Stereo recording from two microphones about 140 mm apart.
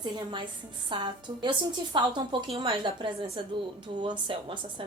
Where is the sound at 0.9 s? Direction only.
35° right (ahead or behind).